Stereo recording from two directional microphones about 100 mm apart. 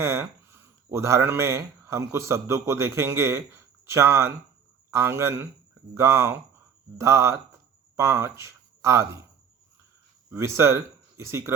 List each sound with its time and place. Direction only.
0.0 s a man's voice: 25° right (ahead or behind)
10.3 s speech: 30° right (ahead or behind)